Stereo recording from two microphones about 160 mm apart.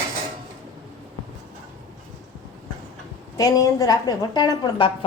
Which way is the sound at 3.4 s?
20° left (ahead or behind).